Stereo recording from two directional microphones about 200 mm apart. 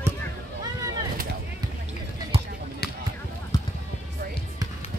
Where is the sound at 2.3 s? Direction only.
30° right (ahead or behind).